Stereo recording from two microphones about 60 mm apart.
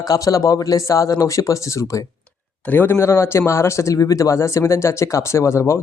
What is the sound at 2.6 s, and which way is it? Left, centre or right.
Speech, left.